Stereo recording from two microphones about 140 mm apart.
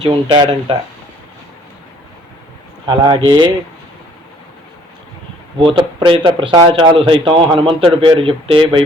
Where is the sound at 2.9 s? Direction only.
30° right (ahead or behind).